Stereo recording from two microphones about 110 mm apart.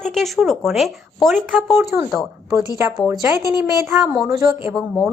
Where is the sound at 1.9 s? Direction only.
20° right (ahead or behind).